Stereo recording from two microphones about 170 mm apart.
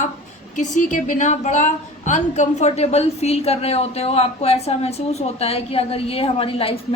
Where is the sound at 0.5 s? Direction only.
45° left (ahead or behind).